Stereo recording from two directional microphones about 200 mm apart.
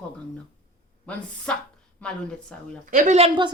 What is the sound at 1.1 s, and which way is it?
A man's voice, 5° left (ahead or behind).